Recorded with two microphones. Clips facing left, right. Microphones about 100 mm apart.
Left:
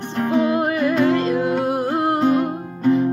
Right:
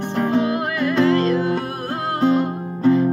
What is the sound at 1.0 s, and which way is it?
Music, 20° left (ahead or behind).